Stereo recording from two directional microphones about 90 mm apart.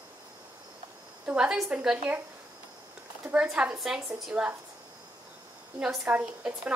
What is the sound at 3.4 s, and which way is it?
A woman's voice, 15° right (ahead or behind).